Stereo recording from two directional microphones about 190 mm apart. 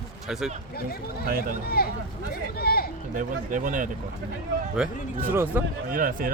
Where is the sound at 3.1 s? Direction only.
45° right (ahead or behind).